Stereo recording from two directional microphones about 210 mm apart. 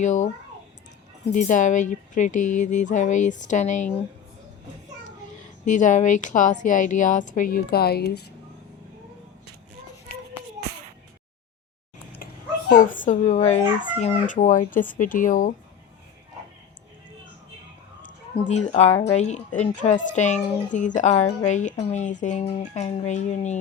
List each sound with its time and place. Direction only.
0.0 s speech: 35° left (ahead or behind)
1.3 s speech: 35° left (ahead or behind)
5.6 s speech: 35° left (ahead or behind)
12.2 s speech: 40° left (ahead or behind)
18.0 s speech: 35° left (ahead or behind)